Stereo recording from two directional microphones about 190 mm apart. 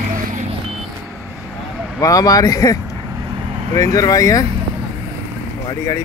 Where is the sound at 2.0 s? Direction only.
20° left (ahead or behind).